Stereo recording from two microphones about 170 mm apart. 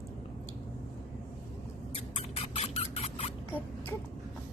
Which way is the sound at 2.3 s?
35° left (ahead or behind).